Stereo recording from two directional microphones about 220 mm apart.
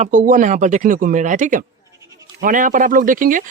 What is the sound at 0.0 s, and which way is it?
Speech, 35° right (ahead or behind).